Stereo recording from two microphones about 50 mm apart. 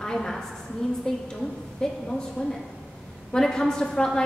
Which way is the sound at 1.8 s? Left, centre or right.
Centre.